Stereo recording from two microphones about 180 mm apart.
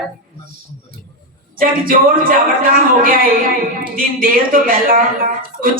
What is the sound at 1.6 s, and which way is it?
Speech, 50° right (ahead or behind).